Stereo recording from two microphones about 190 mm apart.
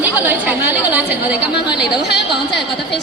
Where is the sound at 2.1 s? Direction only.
65° left (ahead or behind).